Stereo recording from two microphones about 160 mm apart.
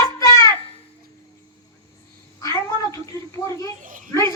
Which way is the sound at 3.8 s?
55° right (ahead or behind).